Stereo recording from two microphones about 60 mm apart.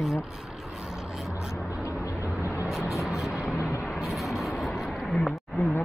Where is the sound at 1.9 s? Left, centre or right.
Left.